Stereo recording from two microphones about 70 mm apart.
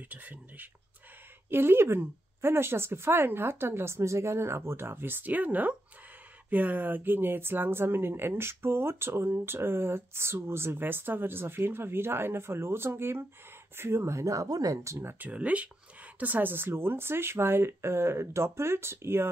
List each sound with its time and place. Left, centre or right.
0.1 s speech: right
15.2 s speech: right